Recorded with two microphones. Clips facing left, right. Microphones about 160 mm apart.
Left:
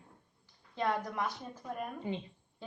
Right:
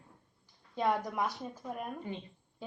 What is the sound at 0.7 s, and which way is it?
A woman's voice, 10° right (ahead or behind).